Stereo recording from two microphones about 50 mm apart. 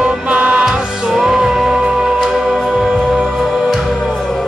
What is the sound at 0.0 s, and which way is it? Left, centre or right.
Music, right.